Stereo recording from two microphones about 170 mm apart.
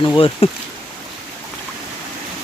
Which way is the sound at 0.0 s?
30° left (ahead or behind).